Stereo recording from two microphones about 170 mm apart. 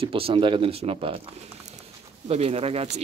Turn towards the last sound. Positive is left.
turn(degrees=-35)  # may be behind; listen again after turning